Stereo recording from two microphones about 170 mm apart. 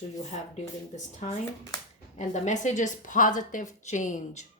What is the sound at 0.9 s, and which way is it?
Speech, 40° left (ahead or behind).